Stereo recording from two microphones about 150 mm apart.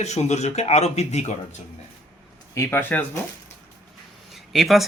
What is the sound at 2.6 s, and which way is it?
Speech, 10° left (ahead or behind).